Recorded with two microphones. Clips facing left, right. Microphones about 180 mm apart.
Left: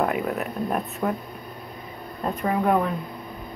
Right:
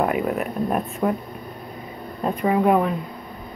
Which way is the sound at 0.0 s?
5° right (ahead or behind).